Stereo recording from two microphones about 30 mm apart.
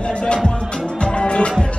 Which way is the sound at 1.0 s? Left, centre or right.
Left.